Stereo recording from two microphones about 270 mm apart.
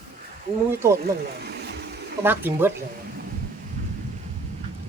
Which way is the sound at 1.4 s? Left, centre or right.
Right.